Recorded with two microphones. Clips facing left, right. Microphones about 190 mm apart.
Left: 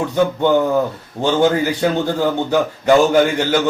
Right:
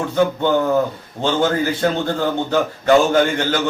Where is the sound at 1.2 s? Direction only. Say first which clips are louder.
Left 3 dB; 15° left (ahead or behind).